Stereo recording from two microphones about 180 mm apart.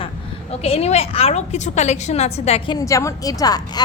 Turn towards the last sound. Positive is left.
turn(degrees=20)  # may be behind; listen again after turning